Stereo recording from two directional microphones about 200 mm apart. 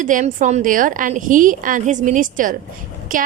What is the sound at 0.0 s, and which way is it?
A woman's voice, 40° right (ahead or behind).